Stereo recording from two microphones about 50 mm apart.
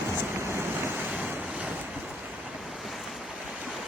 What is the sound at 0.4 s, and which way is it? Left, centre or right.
Waves, right.